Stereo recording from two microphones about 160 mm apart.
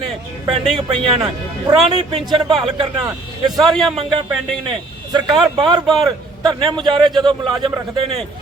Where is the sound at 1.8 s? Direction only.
30° right (ahead or behind).